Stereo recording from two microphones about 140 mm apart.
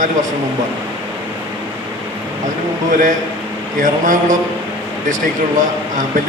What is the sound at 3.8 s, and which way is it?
Speech, 65° right (ahead or behind).